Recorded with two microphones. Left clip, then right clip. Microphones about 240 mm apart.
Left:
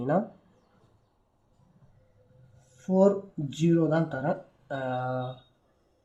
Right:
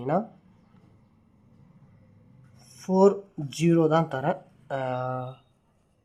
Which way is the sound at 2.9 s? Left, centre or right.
Right.